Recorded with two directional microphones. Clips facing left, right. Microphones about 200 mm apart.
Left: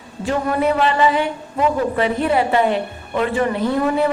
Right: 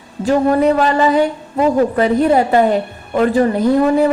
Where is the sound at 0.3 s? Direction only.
40° right (ahead or behind).